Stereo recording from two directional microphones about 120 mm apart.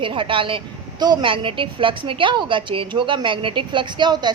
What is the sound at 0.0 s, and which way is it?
A woman's voice, 45° right (ahead or behind).